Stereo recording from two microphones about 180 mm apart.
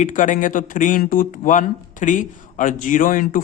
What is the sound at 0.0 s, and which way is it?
Speech, 45° left (ahead or behind).